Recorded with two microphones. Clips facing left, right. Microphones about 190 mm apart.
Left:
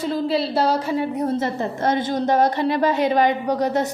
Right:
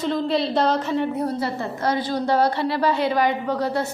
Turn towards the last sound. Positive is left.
turn(degrees=20)  # may be behind; listen again after turning